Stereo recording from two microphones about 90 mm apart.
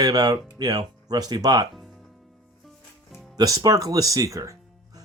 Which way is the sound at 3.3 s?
45° right (ahead or behind).